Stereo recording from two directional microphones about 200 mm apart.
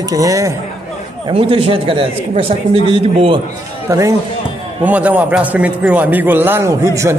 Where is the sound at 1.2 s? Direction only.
25° right (ahead or behind).